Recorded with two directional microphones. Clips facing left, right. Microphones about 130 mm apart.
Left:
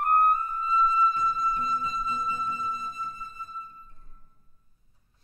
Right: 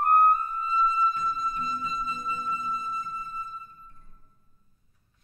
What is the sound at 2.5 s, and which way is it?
Music, 30° right (ahead or behind).